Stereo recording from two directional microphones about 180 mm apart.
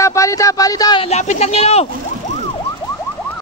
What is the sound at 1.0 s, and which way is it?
Speech, 35° left (ahead or behind).